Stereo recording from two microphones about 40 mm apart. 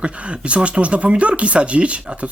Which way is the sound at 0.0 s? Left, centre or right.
Right.